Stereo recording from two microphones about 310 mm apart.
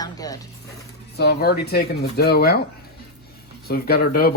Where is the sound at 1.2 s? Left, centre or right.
Left.